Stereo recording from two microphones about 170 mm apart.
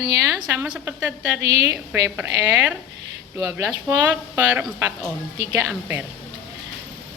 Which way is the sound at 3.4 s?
20° right (ahead or behind).